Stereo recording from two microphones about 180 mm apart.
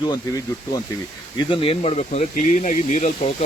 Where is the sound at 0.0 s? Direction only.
20° left (ahead or behind).